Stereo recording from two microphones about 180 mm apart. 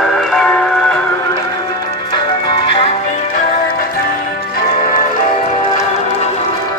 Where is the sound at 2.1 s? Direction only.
25° left (ahead or behind); by 3.5 s 40° left (ahead or behind).